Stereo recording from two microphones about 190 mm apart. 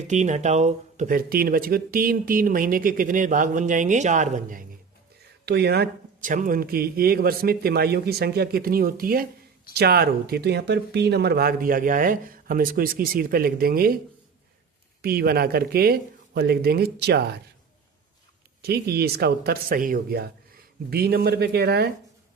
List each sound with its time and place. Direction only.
0.1 s speech: 40° right (ahead or behind)
5.5 s speech: 60° right (ahead or behind)
15.0 s speech: 55° right (ahead or behind)
18.6 s speech: 55° right (ahead or behind)